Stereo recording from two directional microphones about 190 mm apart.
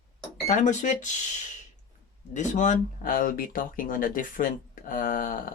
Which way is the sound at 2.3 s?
40° left (ahead or behind).